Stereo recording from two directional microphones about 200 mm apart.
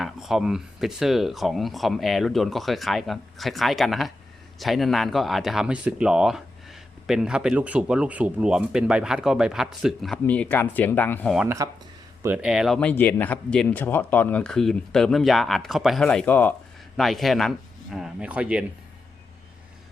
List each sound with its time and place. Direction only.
0.0 s speech: centre (ahead or behind)
11.4 s speech: 15° right (ahead or behind)